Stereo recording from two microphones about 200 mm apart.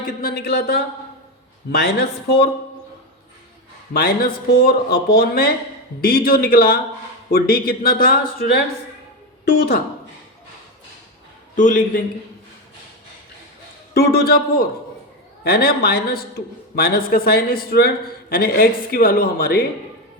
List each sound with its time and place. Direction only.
0.2 s a man's voice: 50° left (ahead or behind)
3.9 s a man's voice: 50° left (ahead or behind)
11.5 s a man's voice: 40° left (ahead or behind)
13.9 s a man's voice: 50° left (ahead or behind)